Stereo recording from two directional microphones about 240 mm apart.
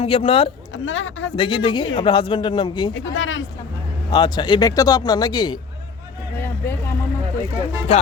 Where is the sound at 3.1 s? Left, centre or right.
Left.